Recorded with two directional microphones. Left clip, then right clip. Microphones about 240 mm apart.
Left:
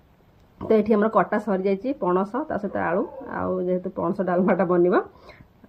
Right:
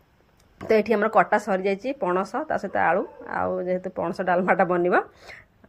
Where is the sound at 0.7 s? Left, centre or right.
Centre.